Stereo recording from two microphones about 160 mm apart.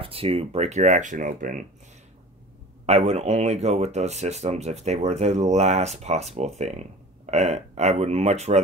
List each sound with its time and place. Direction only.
0.0 s speech: 35° right (ahead or behind); by 1.7 s 55° right (ahead or behind)
2.9 s speech: 40° right (ahead or behind)